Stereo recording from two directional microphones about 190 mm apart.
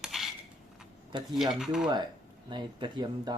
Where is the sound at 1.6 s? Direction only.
Centre (ahead or behind).